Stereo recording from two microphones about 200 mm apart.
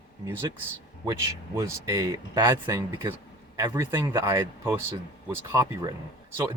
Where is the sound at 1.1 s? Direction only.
15° right (ahead or behind).